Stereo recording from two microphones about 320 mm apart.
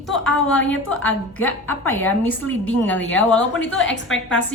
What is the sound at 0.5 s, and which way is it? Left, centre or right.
Speech, left.